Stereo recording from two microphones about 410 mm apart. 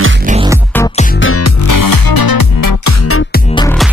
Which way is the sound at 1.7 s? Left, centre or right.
Left.